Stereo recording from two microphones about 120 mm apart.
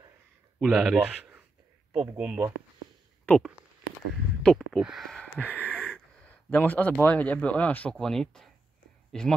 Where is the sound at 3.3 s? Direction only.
10° left (ahead or behind).